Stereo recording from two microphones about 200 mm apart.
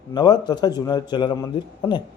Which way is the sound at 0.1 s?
20° left (ahead or behind).